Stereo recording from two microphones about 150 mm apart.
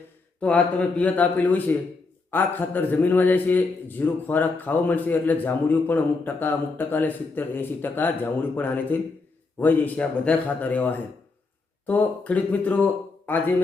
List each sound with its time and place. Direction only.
0.3 s a man's voice: 10° left (ahead or behind)